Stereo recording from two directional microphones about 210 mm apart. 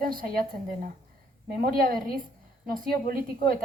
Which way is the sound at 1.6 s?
45° right (ahead or behind).